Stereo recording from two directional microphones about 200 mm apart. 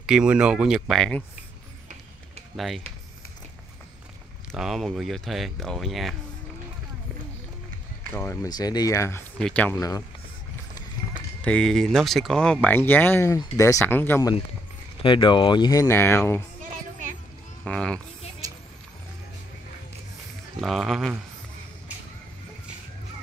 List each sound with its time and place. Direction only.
0.0 s speech: 5° right (ahead or behind)
2.5 s speech: centre (ahead or behind)
4.5 s speech: centre (ahead or behind)
8.1 s speech: 10° left (ahead or behind)
11.4 s speech: 5° left (ahead or behind)
15.0 s speech: 25° left (ahead or behind)
17.6 s speech: 5° left (ahead or behind)
18.4 s vehicle: 15° right (ahead or behind)
20.6 s speech: centre (ahead or behind)